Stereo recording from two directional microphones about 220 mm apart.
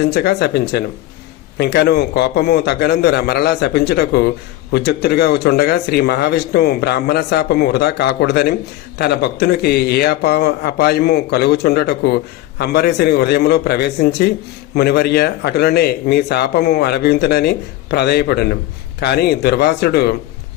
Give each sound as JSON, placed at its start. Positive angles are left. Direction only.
{"t": 0.0, "sound": "a man's voice", "side_deg": 45}